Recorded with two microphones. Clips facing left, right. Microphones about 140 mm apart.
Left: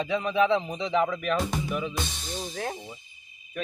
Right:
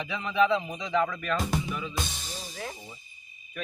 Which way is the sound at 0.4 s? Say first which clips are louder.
Left 2 dB; 25° left (ahead or behind).